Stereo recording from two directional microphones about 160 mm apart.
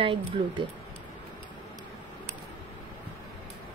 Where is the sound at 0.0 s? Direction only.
30° right (ahead or behind).